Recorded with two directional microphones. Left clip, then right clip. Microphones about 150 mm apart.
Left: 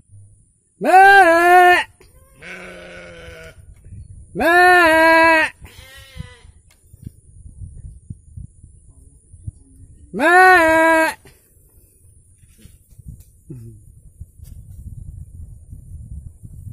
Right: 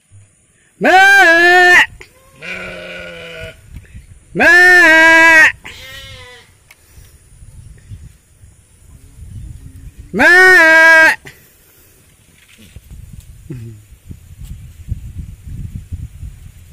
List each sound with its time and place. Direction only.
0.7 s sheep: centre (ahead or behind)
2.8 s sheep: 35° left (ahead or behind)
3.1 s sheep: 10° right (ahead or behind)
4.3 s bleat: 5° left (ahead or behind)
10.1 s bleat: centre (ahead or behind)